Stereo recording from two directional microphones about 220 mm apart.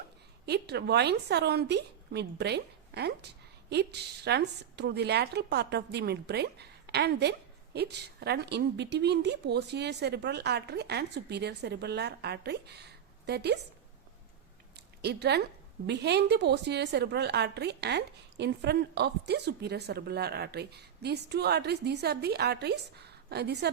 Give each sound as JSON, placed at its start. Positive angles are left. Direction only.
{"t": 0.4, "sound": "a woman's voice", "side_deg": -50}
{"t": 15.0, "sound": "a woman's voice", "side_deg": -50}